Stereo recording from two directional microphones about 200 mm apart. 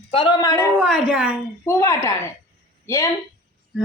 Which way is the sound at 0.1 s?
20° left (ahead or behind).